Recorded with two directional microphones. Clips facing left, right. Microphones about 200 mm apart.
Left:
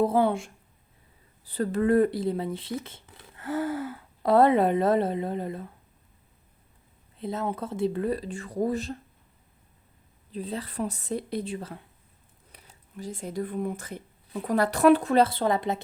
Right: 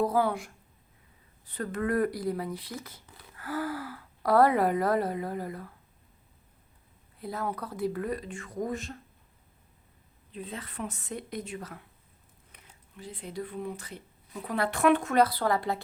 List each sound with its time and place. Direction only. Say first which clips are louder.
0.0 s speech: left 4 dB; 25° left (ahead or behind)
7.2 s speech: left 4 dB; 25° left (ahead or behind)
10.3 s speech: left 6 dB; 35° left (ahead or behind)
13.0 s speech: left 5 dB; 45° left (ahead or behind); by 15.8 s 20° left (ahead or behind)